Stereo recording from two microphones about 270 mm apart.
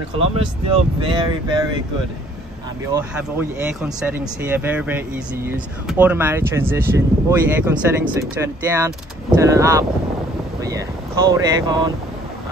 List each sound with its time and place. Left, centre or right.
0.7 s speech: centre
2.9 s speech: centre